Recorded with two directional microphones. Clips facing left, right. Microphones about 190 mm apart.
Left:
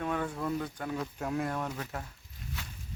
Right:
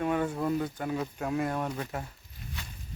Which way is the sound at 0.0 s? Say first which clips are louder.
Right 4 dB; 10° right (ahead or behind).